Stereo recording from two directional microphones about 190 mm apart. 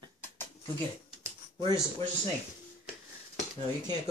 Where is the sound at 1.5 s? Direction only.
20° right (ahead or behind).